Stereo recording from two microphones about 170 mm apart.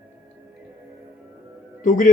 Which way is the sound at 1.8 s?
50° left (ahead or behind).